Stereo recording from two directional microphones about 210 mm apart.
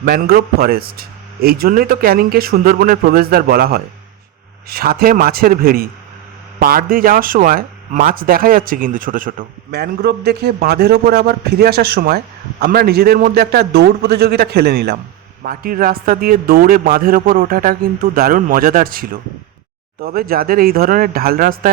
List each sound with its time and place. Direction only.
0.0 s speech: 45° right (ahead or behind)